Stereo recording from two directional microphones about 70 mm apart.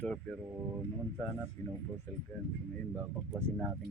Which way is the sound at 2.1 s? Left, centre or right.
Left.